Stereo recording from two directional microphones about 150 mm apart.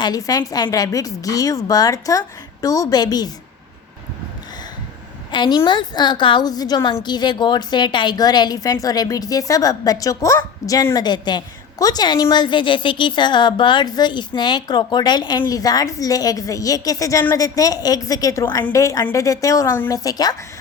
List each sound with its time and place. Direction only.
0.0 s a woman's voice: 25° left (ahead or behind)
5.3 s a woman's voice: 30° left (ahead or behind)